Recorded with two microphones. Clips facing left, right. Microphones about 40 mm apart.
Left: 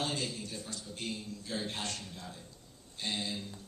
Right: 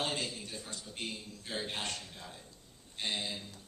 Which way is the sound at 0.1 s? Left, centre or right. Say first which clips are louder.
Even; right.